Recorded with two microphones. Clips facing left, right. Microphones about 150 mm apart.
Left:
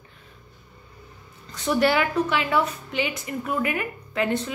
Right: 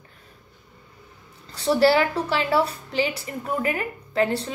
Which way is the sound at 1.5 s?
30° right (ahead or behind).